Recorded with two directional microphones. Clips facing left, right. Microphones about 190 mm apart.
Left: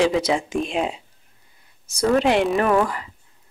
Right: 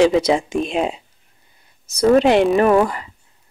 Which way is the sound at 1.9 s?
20° right (ahead or behind).